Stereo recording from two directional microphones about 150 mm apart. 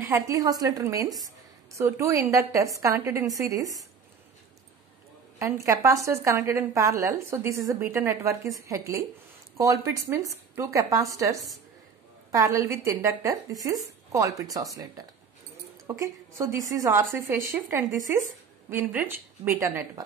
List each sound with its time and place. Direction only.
0.3 s a woman's voice: 25° right (ahead or behind)
5.4 s a woman's voice: 20° right (ahead or behind)